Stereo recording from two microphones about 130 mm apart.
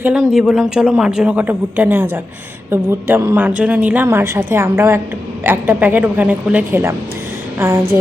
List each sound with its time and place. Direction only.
0.0 s a woman's voice: 5° right (ahead or behind)